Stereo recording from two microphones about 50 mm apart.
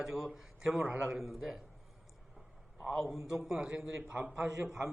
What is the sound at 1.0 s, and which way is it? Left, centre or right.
Speech, centre.